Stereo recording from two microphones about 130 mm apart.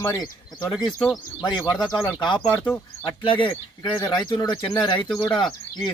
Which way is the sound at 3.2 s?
40° left (ahead or behind).